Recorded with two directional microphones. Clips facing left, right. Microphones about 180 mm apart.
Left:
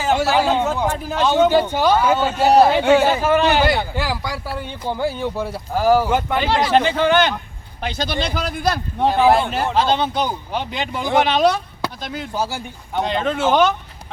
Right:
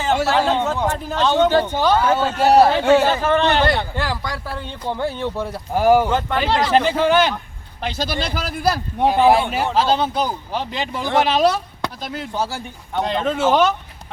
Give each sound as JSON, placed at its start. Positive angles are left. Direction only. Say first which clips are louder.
{"t": 0.0, "sound": "a man's voice", "louder": "left 1 dB", "side_deg": 0}
{"t": 5.7, "sound": "speech", "louder": "right 1 dB", "side_deg": -15}
{"t": 6.1, "sound": "a man's voice", "louder": "left 1 dB", "side_deg": 10}